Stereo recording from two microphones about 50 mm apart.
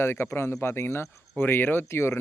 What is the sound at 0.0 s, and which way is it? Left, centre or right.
Speech, left.